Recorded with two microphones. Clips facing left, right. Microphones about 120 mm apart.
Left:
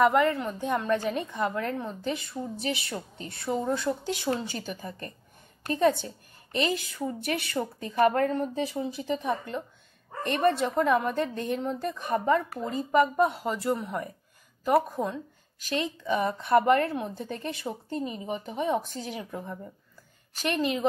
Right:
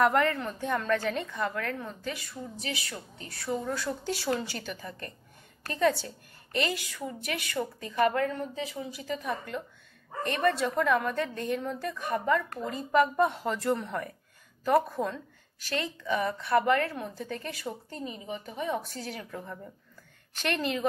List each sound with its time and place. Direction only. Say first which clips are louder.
0.0 s a woman's voice: left 2 dB; 5° left (ahead or behind); by 12.4 s 25° left (ahead or behind)
13.1 s a woman's voice: left 1 dB; 10° left (ahead or behind)
18.0 s a woman's voice: left 1 dB; 40° left (ahead or behind)
18.4 s a woman's voice: left 4 dB; 25° left (ahead or behind)